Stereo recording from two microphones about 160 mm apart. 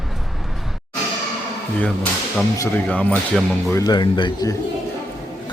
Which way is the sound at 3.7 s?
20° left (ahead or behind).